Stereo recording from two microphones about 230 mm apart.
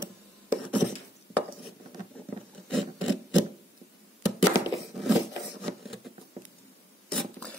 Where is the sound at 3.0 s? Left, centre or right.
Left.